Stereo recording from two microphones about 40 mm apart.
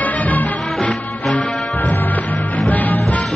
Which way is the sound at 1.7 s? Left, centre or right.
Left.